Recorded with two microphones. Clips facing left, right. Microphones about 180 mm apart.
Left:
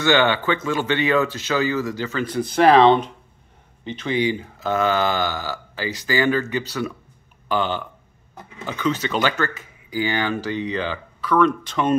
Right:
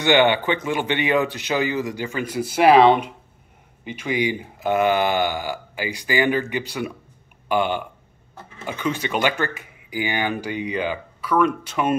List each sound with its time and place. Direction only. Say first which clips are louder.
0.0 s speech: right 1 dB; 15° right (ahead or behind)